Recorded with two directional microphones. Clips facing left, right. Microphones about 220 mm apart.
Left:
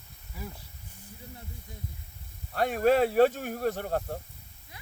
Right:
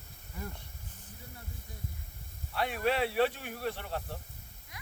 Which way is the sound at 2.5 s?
45° left (ahead or behind).